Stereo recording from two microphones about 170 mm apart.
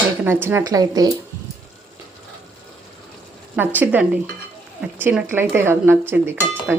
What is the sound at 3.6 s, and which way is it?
Speech, 10° right (ahead or behind).